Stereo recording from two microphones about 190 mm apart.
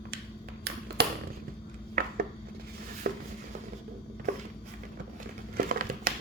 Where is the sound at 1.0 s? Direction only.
55° right (ahead or behind).